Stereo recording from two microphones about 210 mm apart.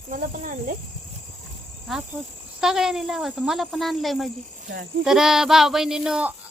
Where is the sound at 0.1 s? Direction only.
40° right (ahead or behind).